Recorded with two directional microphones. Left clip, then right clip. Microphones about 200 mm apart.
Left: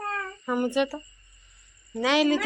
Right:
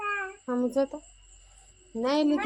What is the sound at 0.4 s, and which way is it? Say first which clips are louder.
Speech: left 2 dB; centre (ahead or behind).